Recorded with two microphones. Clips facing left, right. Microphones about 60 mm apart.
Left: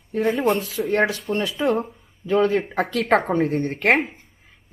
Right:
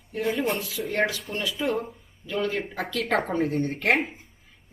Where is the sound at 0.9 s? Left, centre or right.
Left.